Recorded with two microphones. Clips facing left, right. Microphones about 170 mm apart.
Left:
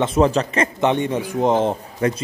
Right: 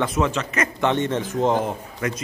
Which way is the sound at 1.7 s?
30° left (ahead or behind).